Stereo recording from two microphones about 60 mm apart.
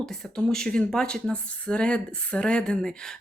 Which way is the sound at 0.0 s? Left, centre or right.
Centre.